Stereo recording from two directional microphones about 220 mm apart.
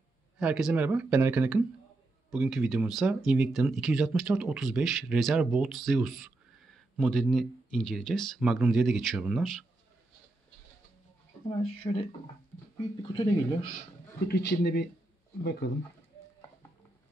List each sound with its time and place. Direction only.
0.4 s speech: 5° right (ahead or behind)
11.4 s speech: 25° left (ahead or behind)
13.1 s speech: 20° left (ahead or behind)
14.2 s a man's voice: 45° left (ahead or behind)